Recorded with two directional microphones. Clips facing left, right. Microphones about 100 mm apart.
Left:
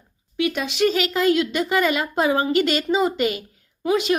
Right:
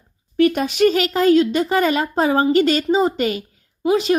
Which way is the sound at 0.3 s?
45° right (ahead or behind).